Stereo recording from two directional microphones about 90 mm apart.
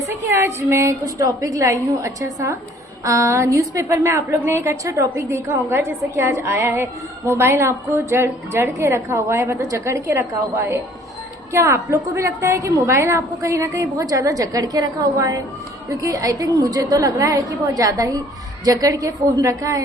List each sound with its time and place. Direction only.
0.0 s a woman's voice: 30° right (ahead or behind)